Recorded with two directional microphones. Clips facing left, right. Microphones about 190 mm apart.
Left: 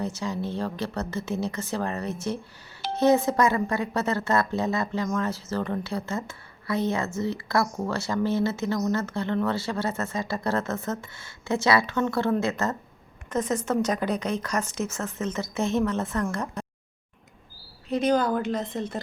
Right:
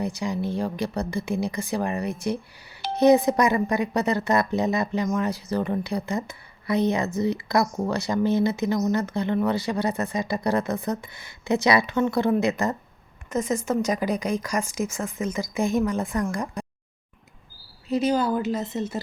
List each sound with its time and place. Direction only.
0.0 s speech: 15° right (ahead or behind)
17.8 s speech: 5° right (ahead or behind)